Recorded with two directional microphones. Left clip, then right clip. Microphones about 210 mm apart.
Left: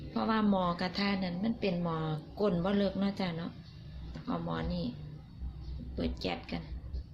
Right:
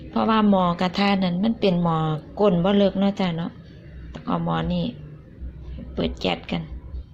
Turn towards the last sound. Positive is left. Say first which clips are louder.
# right 12 dB
turn(degrees=-20)  # may be behind; listen again after turning